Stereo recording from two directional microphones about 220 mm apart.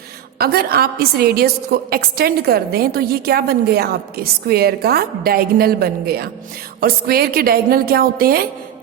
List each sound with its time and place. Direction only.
0.3 s a woman's voice: 45° right (ahead or behind)